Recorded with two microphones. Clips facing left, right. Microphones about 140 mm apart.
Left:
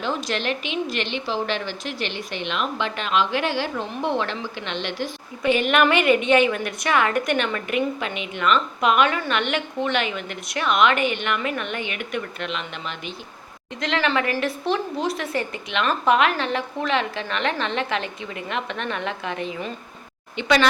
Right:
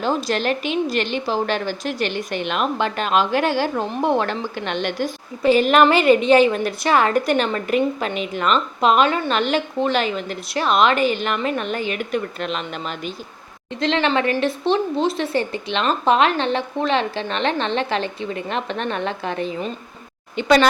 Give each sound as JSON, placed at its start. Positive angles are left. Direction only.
{"t": 0.0, "sound": "a woman's voice", "side_deg": -35}
{"t": 13.7, "sound": "a woman's voice", "side_deg": -30}